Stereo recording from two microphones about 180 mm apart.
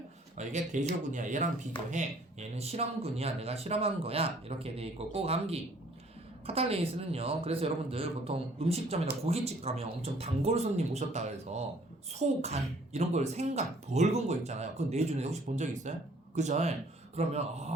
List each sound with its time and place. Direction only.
0.3 s speech: 40° right (ahead or behind)